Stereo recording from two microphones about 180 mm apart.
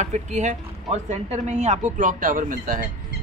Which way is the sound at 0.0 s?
40° right (ahead or behind).